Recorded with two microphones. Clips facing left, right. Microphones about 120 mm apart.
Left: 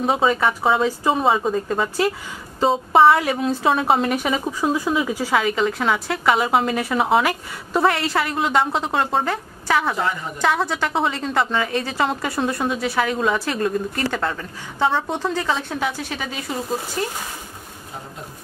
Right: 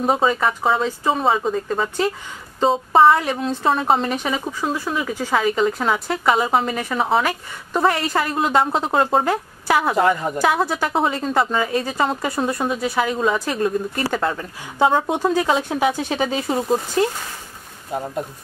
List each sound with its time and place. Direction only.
0.0 s a woman's voice: centre (ahead or behind)
5.4 s a woman's voice: centre (ahead or behind); by 16.5 s 30° right (ahead or behind)